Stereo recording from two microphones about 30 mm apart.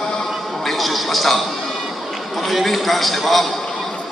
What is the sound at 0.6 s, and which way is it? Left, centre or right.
A man's voice, centre.